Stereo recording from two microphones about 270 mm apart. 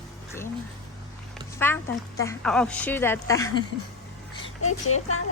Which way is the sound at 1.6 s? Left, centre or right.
Centre.